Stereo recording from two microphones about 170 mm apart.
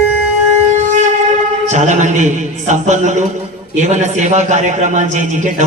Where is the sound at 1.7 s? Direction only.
45° right (ahead or behind).